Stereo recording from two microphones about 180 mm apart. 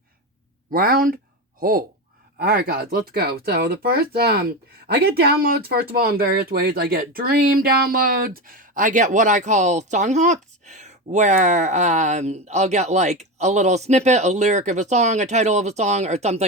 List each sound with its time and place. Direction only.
0.7 s speech: 55° right (ahead or behind); by 16.4 s 35° right (ahead or behind)